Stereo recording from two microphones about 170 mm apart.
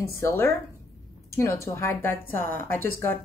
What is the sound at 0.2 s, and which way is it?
A woman's voice, 15° left (ahead or behind).